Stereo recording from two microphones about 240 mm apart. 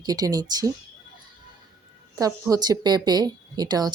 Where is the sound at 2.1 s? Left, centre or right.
Centre.